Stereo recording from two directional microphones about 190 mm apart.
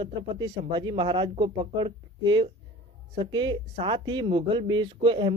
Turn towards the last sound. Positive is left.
turn(degrees=-25)  # may be behind; listen again after turning